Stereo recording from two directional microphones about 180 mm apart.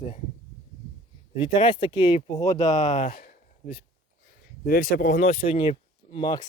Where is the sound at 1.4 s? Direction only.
25° left (ahead or behind).